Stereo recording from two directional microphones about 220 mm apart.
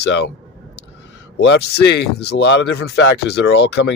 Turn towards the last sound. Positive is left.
turn(degrees=50)  # may be behind; listen again after turning